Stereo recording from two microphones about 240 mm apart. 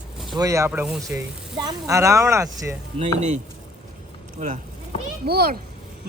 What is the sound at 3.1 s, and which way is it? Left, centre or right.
Speech, right.